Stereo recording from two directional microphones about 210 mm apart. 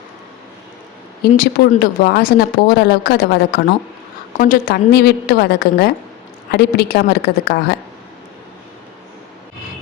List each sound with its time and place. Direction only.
1.3 s speech: 45° left (ahead or behind)